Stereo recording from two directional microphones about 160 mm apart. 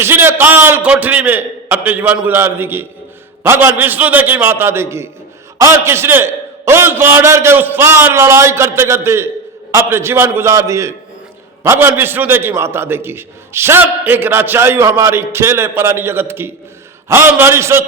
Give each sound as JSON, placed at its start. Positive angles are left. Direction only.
{"t": 0.0, "sound": "a man's voice", "side_deg": -15}